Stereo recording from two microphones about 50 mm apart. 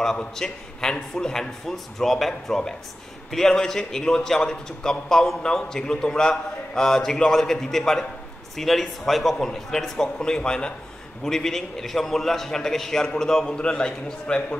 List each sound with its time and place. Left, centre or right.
0.0 s a man's voice: centre
11.2 s a man's voice: centre
13.6 s a man's voice: centre